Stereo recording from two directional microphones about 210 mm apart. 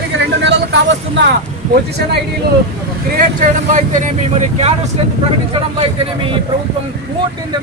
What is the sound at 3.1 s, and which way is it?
Speech, 35° right (ahead or behind).